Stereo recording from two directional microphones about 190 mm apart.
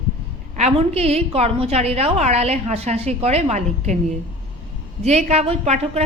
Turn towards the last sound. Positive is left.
turn(degrees=-35)  # may be behind; listen again after turning